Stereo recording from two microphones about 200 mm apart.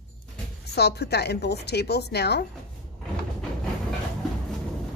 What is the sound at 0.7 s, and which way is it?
A woman's voice, 55° left (ahead or behind).